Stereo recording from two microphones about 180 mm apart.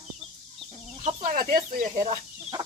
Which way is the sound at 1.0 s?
45° right (ahead or behind).